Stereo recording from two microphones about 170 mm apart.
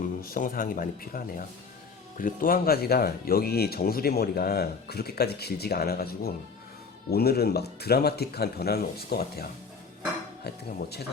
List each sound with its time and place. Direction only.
0.2 s speech: 55° left (ahead or behind)